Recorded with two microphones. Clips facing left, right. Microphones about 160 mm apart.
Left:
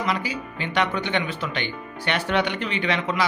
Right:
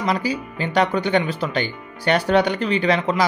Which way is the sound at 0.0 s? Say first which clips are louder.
Right 4 dB; 40° right (ahead or behind).